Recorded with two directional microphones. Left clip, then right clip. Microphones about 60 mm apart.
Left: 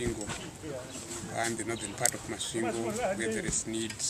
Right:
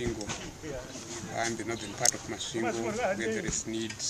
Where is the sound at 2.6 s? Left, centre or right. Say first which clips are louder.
Right 2 dB; right.